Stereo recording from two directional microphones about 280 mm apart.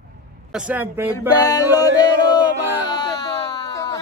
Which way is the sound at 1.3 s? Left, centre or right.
Centre.